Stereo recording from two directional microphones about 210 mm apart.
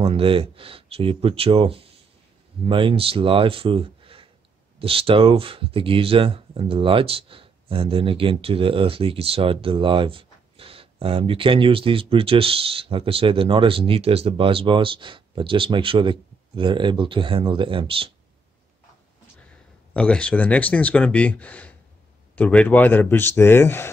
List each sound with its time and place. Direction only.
0.0 s speech: 25° right (ahead or behind)
19.9 s speech: 5° left (ahead or behind)